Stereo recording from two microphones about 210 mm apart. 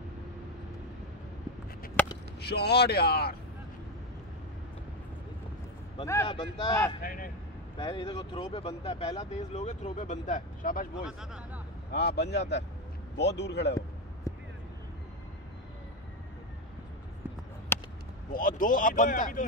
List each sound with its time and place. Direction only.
2.0 s chop: 5° left (ahead or behind)
2.4 s speech: 50° left (ahead or behind)
6.2 s speech: 25° left (ahead or behind)
7.0 s speech: 40° left (ahead or behind)
7.7 s speech: 25° left (ahead or behind); by 11.1 s 40° left (ahead or behind)
11.1 s speech: 5° right (ahead or behind)
11.9 s a man's voice: 50° left (ahead or behind)
14.3 s a sound: 15° left (ahead or behind)
17.7 s a sound: 10° left (ahead or behind)
18.6 s speech: 40° left (ahead or behind)